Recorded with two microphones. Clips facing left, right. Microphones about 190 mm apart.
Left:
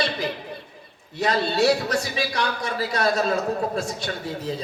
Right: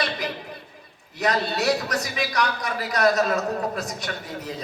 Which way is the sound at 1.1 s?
30° left (ahead or behind).